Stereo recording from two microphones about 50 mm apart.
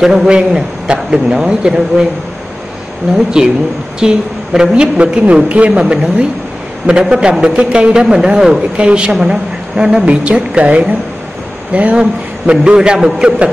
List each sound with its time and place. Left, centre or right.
0.0 s a man's voice: centre
3.4 s a man's voice: centre
7.0 s a man's voice: centre
7.9 s a man's voice: centre